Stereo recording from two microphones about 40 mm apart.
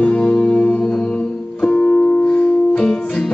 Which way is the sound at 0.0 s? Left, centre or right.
Left.